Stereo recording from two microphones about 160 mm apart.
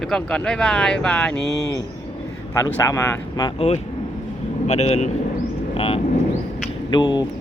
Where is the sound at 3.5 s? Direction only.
40° left (ahead or behind).